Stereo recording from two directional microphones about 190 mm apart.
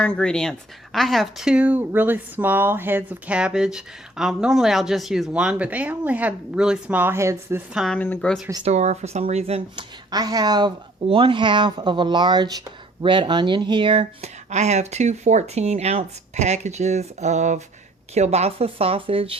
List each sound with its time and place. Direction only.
0.0 s speech: 5° left (ahead or behind); by 7.8 s 15° right (ahead or behind)
7.8 s speech: 5° left (ahead or behind)
8.6 s speech: 35° right (ahead or behind)